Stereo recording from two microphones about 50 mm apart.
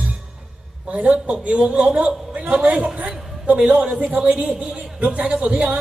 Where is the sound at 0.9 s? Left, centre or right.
Right.